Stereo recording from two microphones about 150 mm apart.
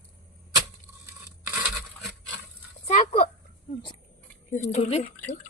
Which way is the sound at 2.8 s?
50° left (ahead or behind).